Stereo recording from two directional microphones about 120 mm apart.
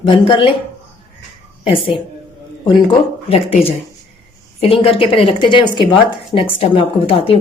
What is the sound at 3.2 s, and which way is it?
Speech, 55° left (ahead or behind).